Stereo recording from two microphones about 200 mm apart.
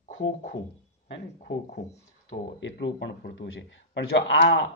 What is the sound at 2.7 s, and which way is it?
Speech, 55° left (ahead or behind).